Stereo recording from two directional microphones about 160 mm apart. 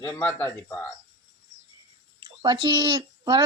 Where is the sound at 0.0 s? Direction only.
10° left (ahead or behind).